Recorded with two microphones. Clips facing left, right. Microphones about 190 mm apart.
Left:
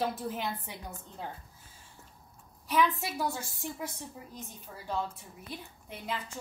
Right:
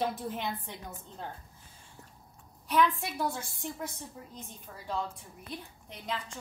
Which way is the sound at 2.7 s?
5° left (ahead or behind).